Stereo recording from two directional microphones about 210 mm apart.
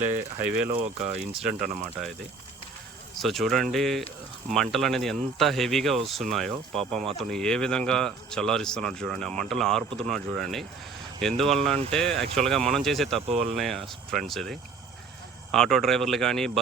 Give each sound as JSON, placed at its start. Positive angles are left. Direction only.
{"t": 0.4, "sound": "speech", "side_deg": -5}
{"t": 0.7, "sound": "speech", "side_deg": -25}
{"t": 1.0, "sound": "speech", "side_deg": -5}
{"t": 3.2, "sound": "speech", "side_deg": 0}
{"t": 13.2, "sound": "speech", "side_deg": -30}
{"t": 13.5, "sound": "speech", "side_deg": 0}